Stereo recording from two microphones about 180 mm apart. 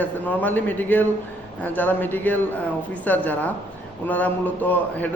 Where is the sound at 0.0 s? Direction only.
10° left (ahead or behind).